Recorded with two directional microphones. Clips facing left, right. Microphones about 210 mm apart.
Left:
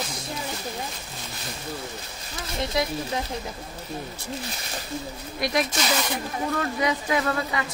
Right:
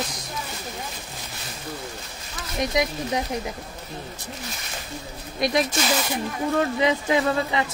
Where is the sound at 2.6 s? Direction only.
15° right (ahead or behind).